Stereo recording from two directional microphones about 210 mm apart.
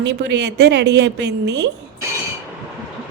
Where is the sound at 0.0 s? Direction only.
55° right (ahead or behind).